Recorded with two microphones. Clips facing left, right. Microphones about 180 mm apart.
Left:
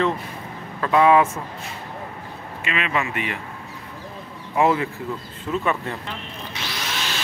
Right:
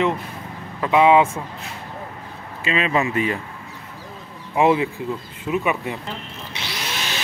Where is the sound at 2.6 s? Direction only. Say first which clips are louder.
Right 4 dB; 30° right (ahead or behind).